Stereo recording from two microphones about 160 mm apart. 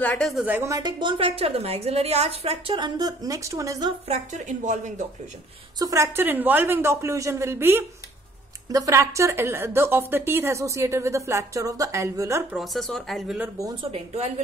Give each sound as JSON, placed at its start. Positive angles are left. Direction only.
{"t": 0.0, "sound": "a woman's voice", "side_deg": 10}
{"t": 0.3, "sound": "speech", "side_deg": -5}
{"t": 0.6, "sound": "a woman's voice", "side_deg": -20}
{"t": 4.1, "sound": "speech", "side_deg": -50}
{"t": 5.8, "sound": "a woman's voice", "side_deg": -20}
{"t": 12.5, "sound": "speech", "side_deg": 0}
{"t": 13.4, "sound": "speech", "side_deg": -20}
{"t": 13.9, "sound": "a woman's voice", "side_deg": -40}